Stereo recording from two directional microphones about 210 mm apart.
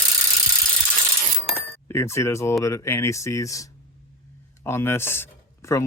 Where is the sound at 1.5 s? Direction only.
10° left (ahead or behind).